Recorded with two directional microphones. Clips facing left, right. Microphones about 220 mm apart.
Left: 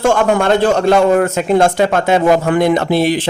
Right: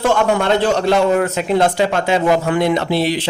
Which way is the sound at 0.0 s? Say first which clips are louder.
Left 3 dB; 50° left (ahead or behind).